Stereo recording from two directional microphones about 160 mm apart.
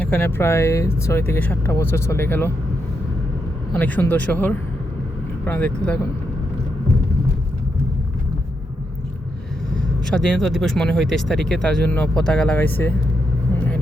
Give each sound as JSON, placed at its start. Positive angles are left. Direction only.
{"t": 0.0, "sound": "speech", "side_deg": 10}
{"t": 3.7, "sound": "speech", "side_deg": 10}
{"t": 9.7, "sound": "speech", "side_deg": 5}